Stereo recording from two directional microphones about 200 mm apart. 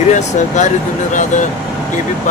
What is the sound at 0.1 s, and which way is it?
Speech, 40° left (ahead or behind).